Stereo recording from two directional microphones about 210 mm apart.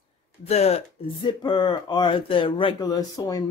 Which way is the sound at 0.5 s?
30° left (ahead or behind).